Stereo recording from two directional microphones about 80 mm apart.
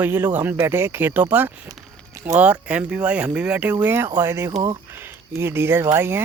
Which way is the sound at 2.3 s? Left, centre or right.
Centre.